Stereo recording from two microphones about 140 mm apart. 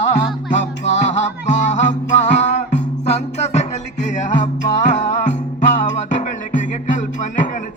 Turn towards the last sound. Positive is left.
turn(degrees=65)  # may be behind; listen again after turning